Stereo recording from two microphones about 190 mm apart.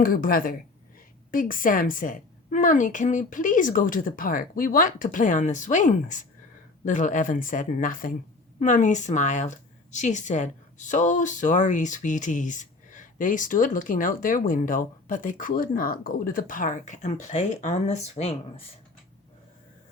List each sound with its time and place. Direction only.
0.0 s a woman's voice: 50° left (ahead or behind); by 18.6 s 30° left (ahead or behind)